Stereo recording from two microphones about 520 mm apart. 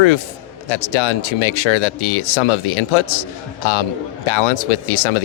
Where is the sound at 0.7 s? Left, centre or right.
Left.